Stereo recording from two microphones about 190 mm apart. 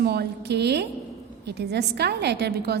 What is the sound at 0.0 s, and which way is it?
A woman's voice, 60° right (ahead or behind).